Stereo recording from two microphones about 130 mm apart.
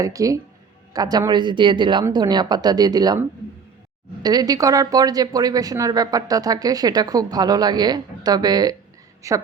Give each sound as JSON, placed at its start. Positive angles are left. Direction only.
{"t": 0.0, "sound": "speech", "side_deg": -25}
{"t": 4.2, "sound": "speech", "side_deg": -30}